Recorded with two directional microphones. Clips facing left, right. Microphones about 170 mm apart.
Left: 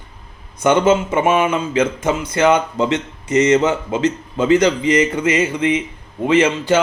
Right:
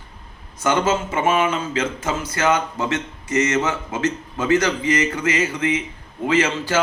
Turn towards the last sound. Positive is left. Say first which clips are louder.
# left 5 dB
turn(degrees=20)  # may be behind; listen again after turning